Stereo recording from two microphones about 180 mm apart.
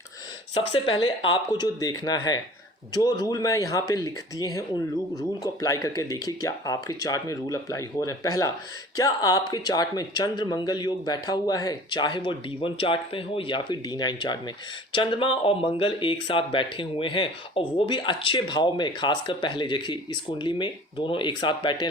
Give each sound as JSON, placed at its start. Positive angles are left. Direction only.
{"t": 0.5, "sound": "speech", "side_deg": 30}